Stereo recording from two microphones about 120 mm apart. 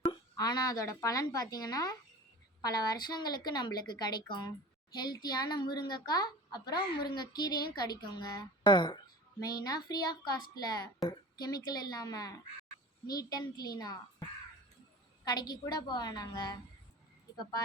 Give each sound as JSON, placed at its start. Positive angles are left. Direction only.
{"t": 0.3, "sound": "a child's voice", "side_deg": 30}